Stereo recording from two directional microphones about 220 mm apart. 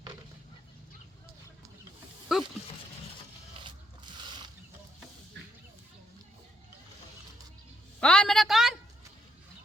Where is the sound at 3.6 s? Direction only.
20° right (ahead or behind).